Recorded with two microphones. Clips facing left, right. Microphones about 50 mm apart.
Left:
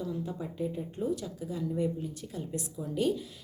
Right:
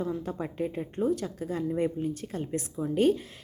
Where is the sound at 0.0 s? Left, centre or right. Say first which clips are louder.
Right 4 dB; right.